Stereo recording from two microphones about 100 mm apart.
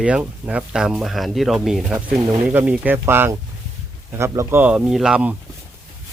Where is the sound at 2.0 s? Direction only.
15° right (ahead or behind).